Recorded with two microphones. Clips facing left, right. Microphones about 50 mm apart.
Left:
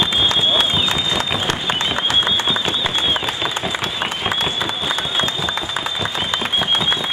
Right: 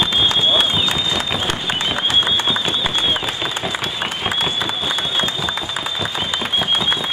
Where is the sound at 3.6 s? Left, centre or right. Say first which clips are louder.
Left 1 dB; centre.